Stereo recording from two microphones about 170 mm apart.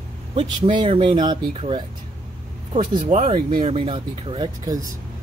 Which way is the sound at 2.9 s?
45° right (ahead or behind).